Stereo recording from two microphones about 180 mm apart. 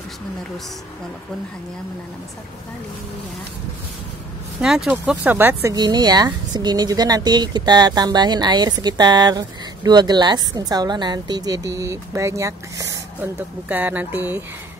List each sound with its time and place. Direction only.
4.6 s speech: 5° right (ahead or behind)